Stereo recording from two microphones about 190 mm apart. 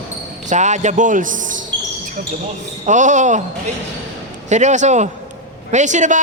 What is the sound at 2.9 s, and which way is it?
Speech, 40° right (ahead or behind).